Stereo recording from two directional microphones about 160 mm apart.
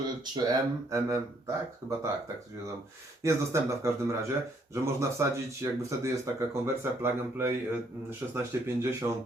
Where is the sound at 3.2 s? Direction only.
20° right (ahead or behind).